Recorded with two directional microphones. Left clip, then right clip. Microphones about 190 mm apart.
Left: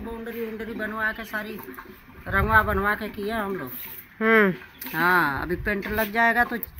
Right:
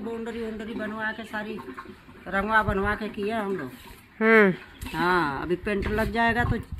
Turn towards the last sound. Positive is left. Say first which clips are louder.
# left 3 dB
turn(degrees=0)  # may be behind; listen again after turning